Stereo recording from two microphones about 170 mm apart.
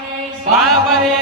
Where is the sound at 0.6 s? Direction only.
Centre (ahead or behind).